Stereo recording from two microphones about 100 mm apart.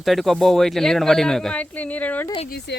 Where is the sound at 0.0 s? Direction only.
Centre (ahead or behind).